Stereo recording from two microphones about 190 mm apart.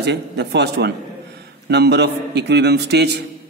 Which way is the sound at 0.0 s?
65° right (ahead or behind).